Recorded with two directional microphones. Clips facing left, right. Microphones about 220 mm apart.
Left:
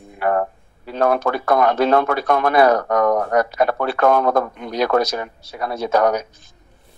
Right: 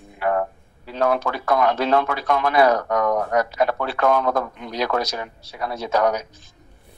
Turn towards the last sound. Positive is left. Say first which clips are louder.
# left 3 dB
turn(degrees=50)  # may be behind; listen again after turning